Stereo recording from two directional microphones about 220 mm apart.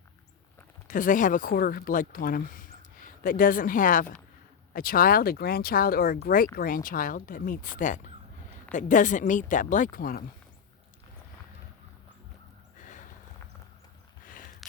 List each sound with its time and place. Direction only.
0.9 s speech: 35° left (ahead or behind)
12.7 s horse: 35° left (ahead or behind)
14.6 s a sound: centre (ahead or behind)